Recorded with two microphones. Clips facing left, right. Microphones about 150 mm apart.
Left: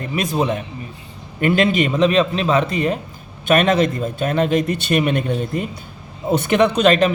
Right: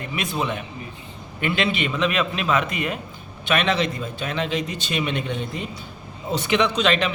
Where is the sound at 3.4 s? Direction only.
45° left (ahead or behind).